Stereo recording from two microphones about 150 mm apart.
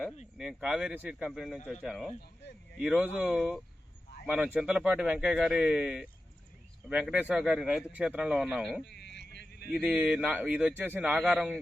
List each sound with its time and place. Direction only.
0.3 s speech: 5° right (ahead or behind)
1.8 s speech: 5° right (ahead or behind)
8.8 s a sound: 90° left
9.8 s speech: 5° right (ahead or behind)